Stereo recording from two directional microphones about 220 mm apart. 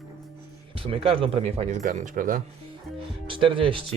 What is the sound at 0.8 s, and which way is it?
Speech, 25° right (ahead or behind).